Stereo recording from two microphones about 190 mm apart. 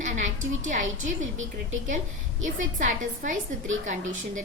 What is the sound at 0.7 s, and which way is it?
Speech, 40° right (ahead or behind).